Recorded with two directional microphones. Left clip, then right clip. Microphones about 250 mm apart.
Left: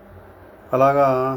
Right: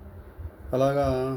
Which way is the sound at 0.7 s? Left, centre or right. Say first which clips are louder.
Left 8 dB; centre.